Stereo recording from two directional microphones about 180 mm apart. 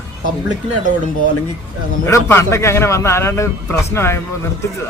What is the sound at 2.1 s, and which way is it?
A man's voice, 15° left (ahead or behind).